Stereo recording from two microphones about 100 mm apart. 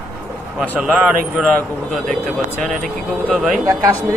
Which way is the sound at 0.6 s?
5° right (ahead or behind).